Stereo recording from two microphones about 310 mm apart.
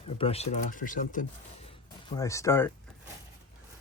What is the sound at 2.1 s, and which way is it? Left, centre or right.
Speech, centre.